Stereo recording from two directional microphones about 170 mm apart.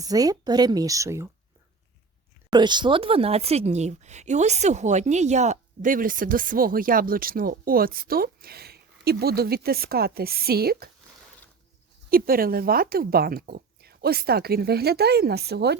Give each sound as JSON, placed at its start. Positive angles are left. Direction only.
{"t": 0.0, "sound": "speech", "side_deg": -20}
{"t": 2.5, "sound": "speech", "side_deg": -25}
{"t": 12.1, "sound": "speech", "side_deg": -60}